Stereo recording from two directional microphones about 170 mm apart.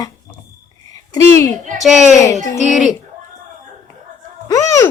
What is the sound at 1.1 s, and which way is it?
Speech, 20° left (ahead or behind).